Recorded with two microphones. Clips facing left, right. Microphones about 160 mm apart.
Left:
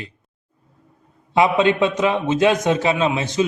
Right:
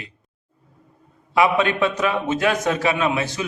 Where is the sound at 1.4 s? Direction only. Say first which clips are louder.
Left 2 dB; 20° left (ahead or behind).